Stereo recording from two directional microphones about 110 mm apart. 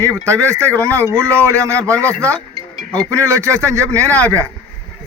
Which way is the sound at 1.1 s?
25° right (ahead or behind).